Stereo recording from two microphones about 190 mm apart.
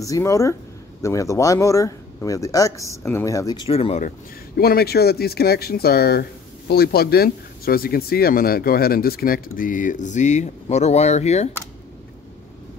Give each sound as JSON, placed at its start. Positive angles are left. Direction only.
{"t": 0.0, "sound": "speech", "side_deg": 15}
{"t": 4.6, "sound": "speech", "side_deg": 55}